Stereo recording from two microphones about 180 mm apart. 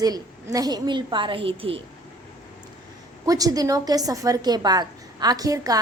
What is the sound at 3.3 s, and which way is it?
A woman's voice, 20° right (ahead or behind).